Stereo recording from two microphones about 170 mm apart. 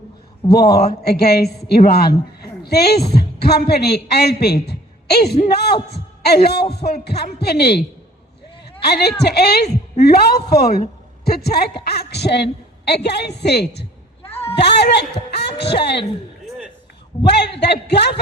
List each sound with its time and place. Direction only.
0.4 s a man's voice: 65° left (ahead or behind)
17.2 s a man's voice: 80° left